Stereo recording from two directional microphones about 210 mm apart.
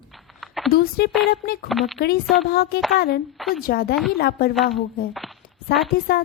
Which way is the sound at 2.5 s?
50° left (ahead or behind).